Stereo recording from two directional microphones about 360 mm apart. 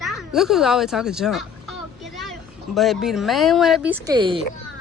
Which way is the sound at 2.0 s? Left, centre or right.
Centre.